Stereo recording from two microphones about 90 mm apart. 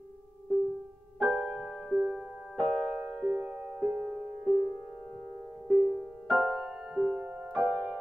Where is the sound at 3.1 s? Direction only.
20° right (ahead or behind).